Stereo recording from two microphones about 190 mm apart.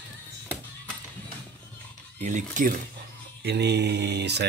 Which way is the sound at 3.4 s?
60° right (ahead or behind).